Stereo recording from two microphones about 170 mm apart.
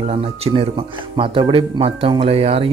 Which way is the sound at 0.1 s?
35° right (ahead or behind).